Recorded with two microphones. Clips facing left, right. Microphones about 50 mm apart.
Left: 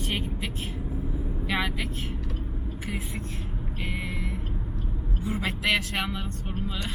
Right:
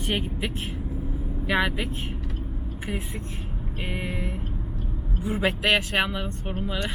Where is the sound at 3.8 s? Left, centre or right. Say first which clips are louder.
Right 3 dB; centre.